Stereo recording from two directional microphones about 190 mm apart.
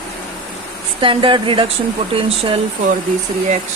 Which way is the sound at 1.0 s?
25° right (ahead or behind).